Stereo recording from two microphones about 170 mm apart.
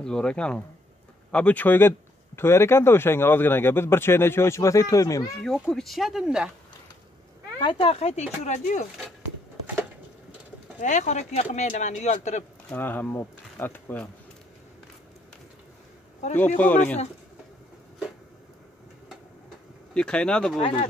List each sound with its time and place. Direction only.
0.0 s speech: 5° left (ahead or behind)
5.4 s speech: centre (ahead or behind)
7.6 s speech: 35° left (ahead or behind)
10.8 s speech: 45° left (ahead or behind)
12.7 s speech: 10° left (ahead or behind)
16.3 s speech: 10° left (ahead or behind)
19.9 s speech: 5° left (ahead or behind)
20.5 s speech: 40° left (ahead or behind)